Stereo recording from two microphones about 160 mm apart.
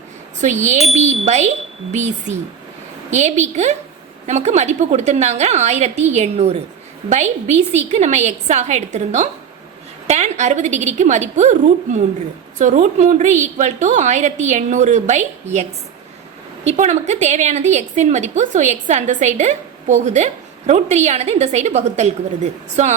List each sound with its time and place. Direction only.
0.4 s a woman's voice: 50° right (ahead or behind)
16.6 s a woman's voice: 45° right (ahead or behind)